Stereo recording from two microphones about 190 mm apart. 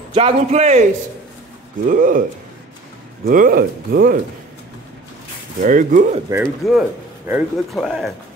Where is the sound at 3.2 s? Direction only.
45° right (ahead or behind).